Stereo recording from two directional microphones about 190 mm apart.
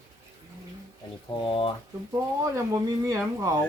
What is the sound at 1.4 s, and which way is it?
Speech, 25° left (ahead or behind).